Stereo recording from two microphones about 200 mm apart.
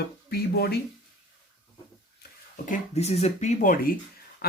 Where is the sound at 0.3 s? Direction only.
50° left (ahead or behind).